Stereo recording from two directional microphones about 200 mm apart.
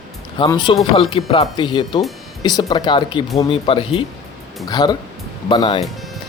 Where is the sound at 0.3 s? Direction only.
20° left (ahead or behind).